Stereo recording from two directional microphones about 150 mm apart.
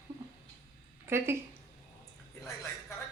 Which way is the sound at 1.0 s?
15° right (ahead or behind).